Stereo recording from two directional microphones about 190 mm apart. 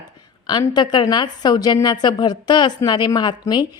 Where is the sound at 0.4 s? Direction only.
20° left (ahead or behind).